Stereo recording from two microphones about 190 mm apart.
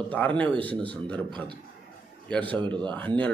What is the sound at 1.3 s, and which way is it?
Speech, 25° right (ahead or behind).